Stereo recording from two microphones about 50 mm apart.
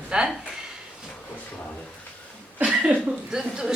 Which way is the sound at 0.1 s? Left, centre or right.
Right.